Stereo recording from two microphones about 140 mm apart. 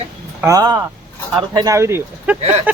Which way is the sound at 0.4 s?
25° right (ahead or behind).